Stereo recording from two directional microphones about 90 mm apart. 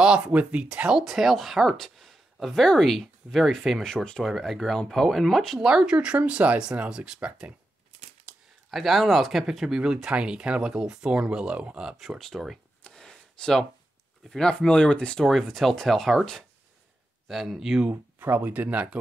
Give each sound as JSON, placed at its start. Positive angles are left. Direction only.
{"t": 0.0, "sound": "speech", "side_deg": -10}
{"t": 8.3, "sound": "a sound", "side_deg": -15}
{"t": 8.6, "sound": "speech", "side_deg": 0}
{"t": 12.2, "sound": "speech", "side_deg": 0}
{"t": 12.8, "sound": "a sound", "side_deg": 10}
{"t": 14.3, "sound": "speech", "side_deg": 10}
{"t": 17.8, "sound": "speech", "side_deg": -20}